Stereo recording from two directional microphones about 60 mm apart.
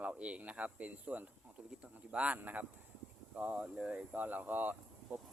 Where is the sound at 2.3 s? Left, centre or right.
Right.